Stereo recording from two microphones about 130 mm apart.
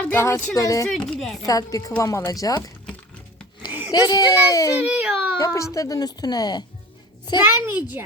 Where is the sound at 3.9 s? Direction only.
30° left (ahead or behind).